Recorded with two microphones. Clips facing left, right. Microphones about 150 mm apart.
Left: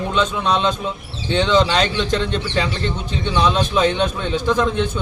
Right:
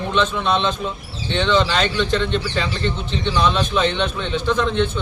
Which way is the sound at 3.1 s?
15° left (ahead or behind).